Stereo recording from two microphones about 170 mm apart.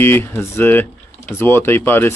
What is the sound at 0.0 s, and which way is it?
Speech, 15° left (ahead or behind).